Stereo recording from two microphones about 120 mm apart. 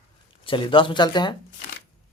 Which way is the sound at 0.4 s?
45° left (ahead or behind).